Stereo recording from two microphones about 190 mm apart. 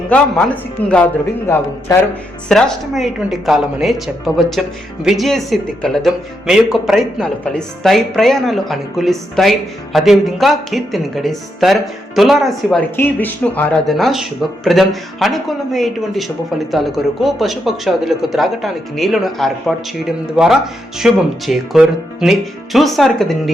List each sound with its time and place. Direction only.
0.8 s speech: 10° left (ahead or behind)
2.5 s speech: 5° left (ahead or behind)